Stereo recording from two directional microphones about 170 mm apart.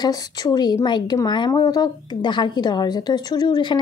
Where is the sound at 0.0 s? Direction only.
25° left (ahead or behind).